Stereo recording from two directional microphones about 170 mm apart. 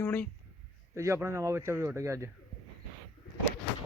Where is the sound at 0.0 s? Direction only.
10° left (ahead or behind).